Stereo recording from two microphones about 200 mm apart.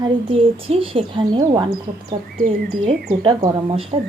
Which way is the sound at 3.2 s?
20° right (ahead or behind).